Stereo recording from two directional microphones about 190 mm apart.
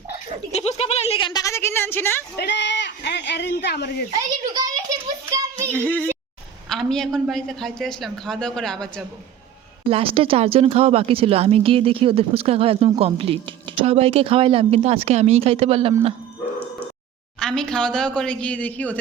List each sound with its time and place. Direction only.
0.5 s speech: 35° left (ahead or behind); by 2.2 s 10° left (ahead or behind)
2.4 s speech: 65° left (ahead or behind)
4.1 s a child's voice: 20° right (ahead or behind)
5.3 s child singing: 15° right (ahead or behind)
5.7 s a woman's voice: 10° left (ahead or behind)
9.8 s speech: 30° right (ahead or behind)
17.4 s a woman's voice: 5° left (ahead or behind)